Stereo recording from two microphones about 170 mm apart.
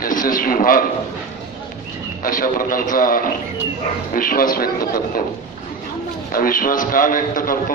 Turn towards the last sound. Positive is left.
turn(degrees=55)  # may be behind; listen again after turning